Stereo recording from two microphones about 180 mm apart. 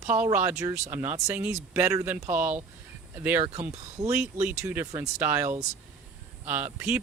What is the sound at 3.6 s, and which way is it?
Speech, 40° right (ahead or behind).